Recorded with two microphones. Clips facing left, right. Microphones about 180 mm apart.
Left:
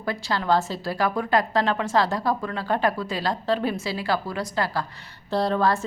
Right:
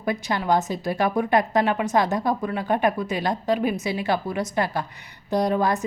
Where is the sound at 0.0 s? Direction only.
20° right (ahead or behind).